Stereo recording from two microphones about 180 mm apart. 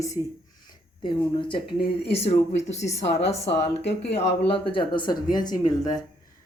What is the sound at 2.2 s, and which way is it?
A woman's voice, 35° left (ahead or behind).